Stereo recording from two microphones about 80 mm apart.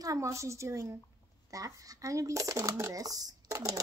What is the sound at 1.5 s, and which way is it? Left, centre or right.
Speech, right.